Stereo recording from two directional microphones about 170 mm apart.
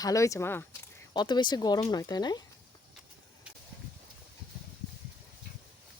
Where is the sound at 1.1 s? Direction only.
25° left (ahead or behind).